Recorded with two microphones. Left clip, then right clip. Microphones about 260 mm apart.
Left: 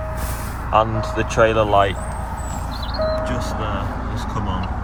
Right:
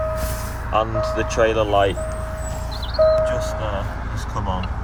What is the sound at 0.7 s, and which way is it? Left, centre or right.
Speech, centre.